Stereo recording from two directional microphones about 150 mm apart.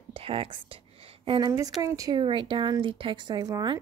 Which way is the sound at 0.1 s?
40° right (ahead or behind).